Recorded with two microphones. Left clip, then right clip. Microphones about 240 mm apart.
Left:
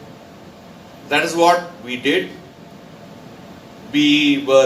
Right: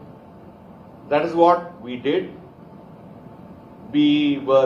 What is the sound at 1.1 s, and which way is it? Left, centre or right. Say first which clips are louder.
Speech: left 2 dB; left.